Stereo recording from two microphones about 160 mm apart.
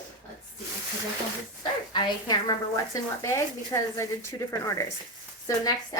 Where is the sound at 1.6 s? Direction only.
25° left (ahead or behind).